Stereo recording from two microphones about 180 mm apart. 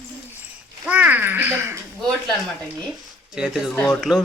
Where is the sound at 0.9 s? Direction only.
10° right (ahead or behind).